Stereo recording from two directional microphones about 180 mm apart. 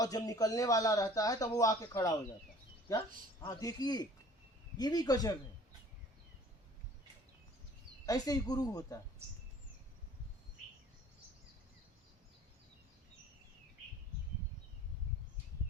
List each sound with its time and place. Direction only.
0.0 s speech: 20° left (ahead or behind)
3.4 s speech: 20° left (ahead or behind)
8.0 s speech: 20° left (ahead or behind)